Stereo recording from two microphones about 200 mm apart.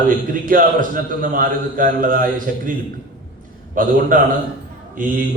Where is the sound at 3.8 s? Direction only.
45° right (ahead or behind).